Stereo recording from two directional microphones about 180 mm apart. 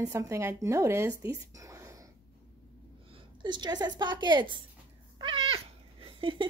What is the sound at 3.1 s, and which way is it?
A woman's voice, 25° right (ahead or behind).